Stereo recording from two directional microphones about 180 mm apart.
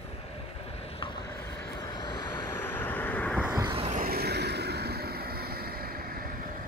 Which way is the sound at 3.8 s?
45° right (ahead or behind).